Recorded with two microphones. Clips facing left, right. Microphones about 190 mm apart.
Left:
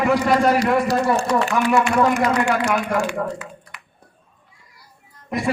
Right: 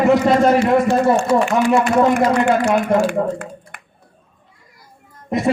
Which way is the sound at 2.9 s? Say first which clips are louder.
Right 8 dB; 25° right (ahead or behind).